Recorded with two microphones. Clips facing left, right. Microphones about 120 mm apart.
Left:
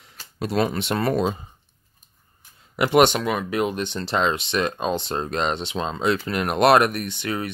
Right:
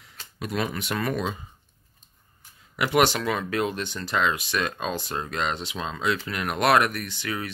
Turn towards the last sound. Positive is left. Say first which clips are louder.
# left 4 dB
turn(degrees=25)  # may be behind; listen again after turning